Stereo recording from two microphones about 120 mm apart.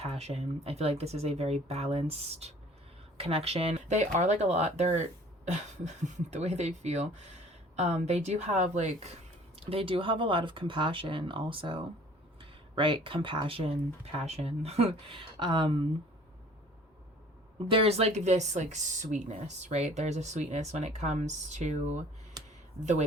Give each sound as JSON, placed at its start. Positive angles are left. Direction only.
{"t": 0.0, "sound": "speech", "side_deg": -65}
{"t": 9.6, "sound": "speech", "side_deg": -50}
{"t": 14.0, "sound": "speech", "side_deg": -65}
{"t": 15.1, "sound": "speech", "side_deg": -40}
{"t": 17.7, "sound": "speech", "side_deg": -55}